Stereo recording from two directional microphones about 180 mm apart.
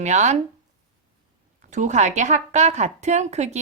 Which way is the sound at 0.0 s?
40° right (ahead or behind).